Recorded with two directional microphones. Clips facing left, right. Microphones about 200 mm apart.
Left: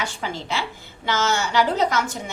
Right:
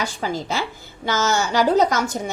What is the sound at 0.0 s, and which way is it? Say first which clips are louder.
A woman's voice: right 4 dB; 40° right (ahead or behind).